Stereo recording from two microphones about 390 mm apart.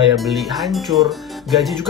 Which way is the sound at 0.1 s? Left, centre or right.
Centre.